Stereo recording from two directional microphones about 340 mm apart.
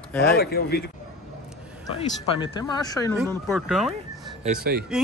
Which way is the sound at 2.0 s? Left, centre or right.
Centre.